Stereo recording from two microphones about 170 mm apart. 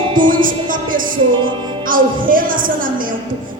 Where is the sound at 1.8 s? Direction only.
55° right (ahead or behind).